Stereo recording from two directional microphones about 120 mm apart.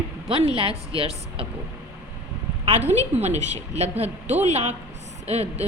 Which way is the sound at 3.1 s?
70° right (ahead or behind).